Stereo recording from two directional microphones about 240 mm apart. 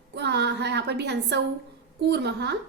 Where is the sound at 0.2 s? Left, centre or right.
Right.